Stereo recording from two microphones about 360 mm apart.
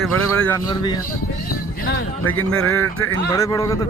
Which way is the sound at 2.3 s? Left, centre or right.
Centre.